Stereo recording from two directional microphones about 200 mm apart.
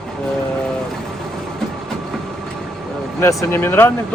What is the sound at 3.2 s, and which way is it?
Speech, 15° left (ahead or behind).